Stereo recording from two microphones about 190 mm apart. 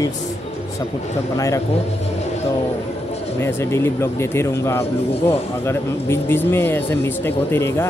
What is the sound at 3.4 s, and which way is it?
Speech, 15° left (ahead or behind).